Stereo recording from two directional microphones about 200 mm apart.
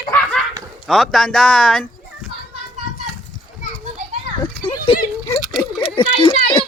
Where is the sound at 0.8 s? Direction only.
Centre (ahead or behind).